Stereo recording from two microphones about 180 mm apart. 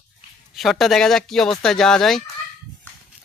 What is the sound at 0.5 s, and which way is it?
Speech, centre (ahead or behind).